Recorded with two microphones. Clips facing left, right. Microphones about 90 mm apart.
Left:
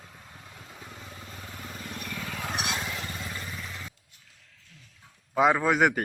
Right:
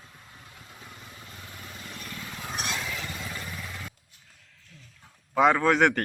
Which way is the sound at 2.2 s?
75° left (ahead or behind).